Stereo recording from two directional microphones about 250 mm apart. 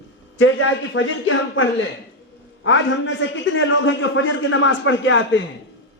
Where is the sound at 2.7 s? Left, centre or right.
Left.